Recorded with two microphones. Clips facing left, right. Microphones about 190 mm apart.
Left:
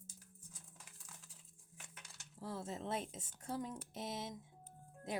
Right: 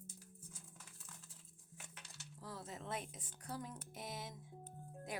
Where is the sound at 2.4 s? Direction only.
25° left (ahead or behind).